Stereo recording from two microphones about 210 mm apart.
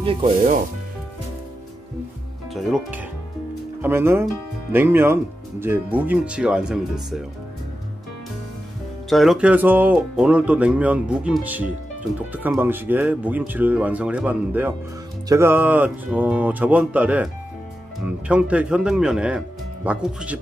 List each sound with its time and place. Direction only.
0.0 s speech: 25° right (ahead or behind)
2.5 s speech: centre (ahead or behind)
9.1 s speech: centre (ahead or behind)